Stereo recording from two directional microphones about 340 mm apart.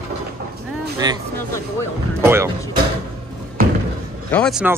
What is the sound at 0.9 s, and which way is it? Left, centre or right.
Speech, centre.